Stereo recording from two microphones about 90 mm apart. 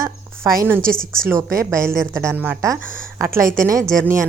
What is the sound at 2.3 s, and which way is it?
Speech, 20° right (ahead or behind).